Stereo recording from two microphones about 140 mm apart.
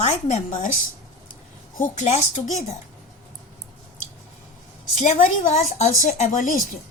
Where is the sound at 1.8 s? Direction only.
55° left (ahead or behind).